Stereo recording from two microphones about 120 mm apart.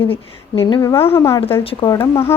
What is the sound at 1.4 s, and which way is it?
Speech, 50° left (ahead or behind).